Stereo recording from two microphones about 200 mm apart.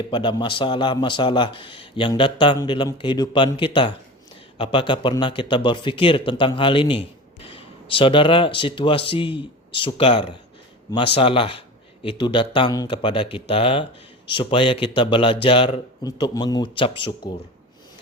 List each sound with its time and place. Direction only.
0.1 s a man's voice: 25° left (ahead or behind)